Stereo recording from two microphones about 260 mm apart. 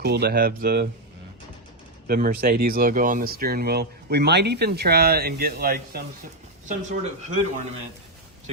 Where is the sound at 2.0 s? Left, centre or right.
Right.